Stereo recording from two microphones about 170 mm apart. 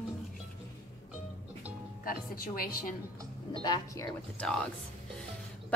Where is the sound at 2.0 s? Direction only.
60° left (ahead or behind).